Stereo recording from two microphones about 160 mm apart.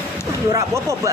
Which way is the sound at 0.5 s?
20° right (ahead or behind).